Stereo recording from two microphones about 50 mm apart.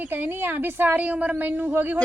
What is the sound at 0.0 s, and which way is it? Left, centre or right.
A woman's voice, right.